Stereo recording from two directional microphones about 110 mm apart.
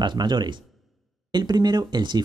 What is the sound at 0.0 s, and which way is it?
Speech, 45° right (ahead or behind).